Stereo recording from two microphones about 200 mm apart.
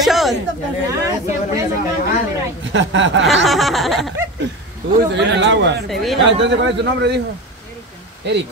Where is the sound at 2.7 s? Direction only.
65° right (ahead or behind).